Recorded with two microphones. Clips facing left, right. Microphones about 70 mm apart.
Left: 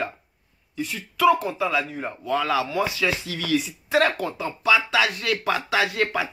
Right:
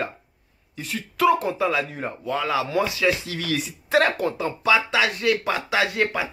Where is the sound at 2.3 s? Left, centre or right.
Centre.